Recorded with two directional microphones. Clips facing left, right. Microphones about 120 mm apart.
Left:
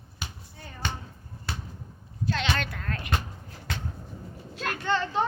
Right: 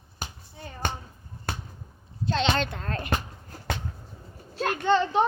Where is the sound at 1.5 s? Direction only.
50° right (ahead or behind).